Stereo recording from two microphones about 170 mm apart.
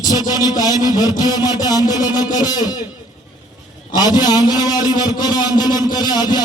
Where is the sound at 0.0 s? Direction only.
25° left (ahead or behind).